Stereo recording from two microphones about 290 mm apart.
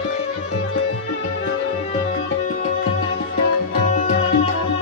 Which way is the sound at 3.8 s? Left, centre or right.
Left.